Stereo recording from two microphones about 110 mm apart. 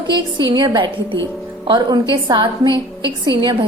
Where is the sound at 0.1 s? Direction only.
40° right (ahead or behind).